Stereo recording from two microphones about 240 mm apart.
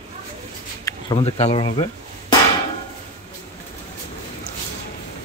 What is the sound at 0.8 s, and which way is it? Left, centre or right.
Speech, left.